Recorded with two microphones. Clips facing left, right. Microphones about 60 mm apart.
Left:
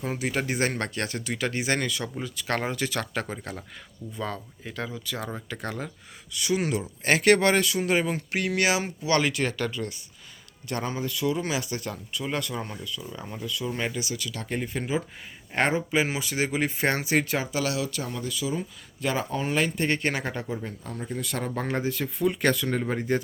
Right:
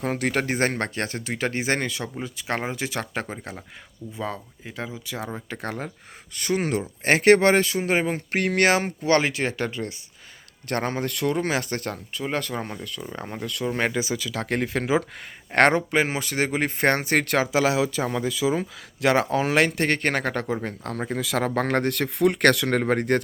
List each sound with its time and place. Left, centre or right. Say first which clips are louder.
0.0 s speech: right 4 dB; right
5.5 s speech: right 2 dB; right
10.7 s speech: right 4 dB; right
11.0 s speech: right 3 dB; right
12.1 s speech: right 2 dB; right
12.8 s speech: right 1 dB; right
13.1 s speech: right 4 dB; right
13.4 s speech: right 4 dB; right
14.5 s speech: right 6 dB; right
15.5 s speech: right 7 dB; right
15.9 s speech: right 3 dB; right
18.4 s speech: right 7 dB; right
19.0 s speech: right 7 dB; right